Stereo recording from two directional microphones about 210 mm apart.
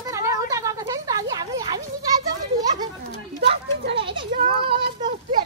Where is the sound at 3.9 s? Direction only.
25° right (ahead or behind).